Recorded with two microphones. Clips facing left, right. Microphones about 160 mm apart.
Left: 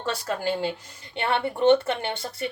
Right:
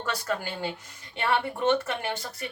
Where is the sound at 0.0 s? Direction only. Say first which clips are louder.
Left 3 dB; 30° left (ahead or behind).